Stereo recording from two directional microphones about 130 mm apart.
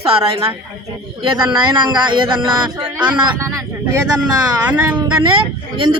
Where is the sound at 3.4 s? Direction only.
25° right (ahead or behind).